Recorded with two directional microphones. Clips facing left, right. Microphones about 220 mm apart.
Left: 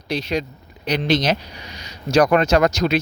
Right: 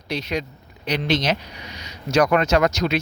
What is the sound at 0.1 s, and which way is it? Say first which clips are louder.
Speech: left 3 dB; 30° left (ahead or behind).